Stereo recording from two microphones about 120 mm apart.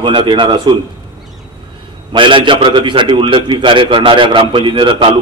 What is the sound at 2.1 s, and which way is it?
A man's voice, 45° right (ahead or behind).